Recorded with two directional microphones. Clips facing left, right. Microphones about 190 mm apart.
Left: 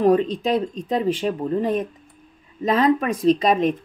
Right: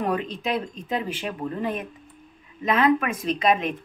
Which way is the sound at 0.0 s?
35° left (ahead or behind).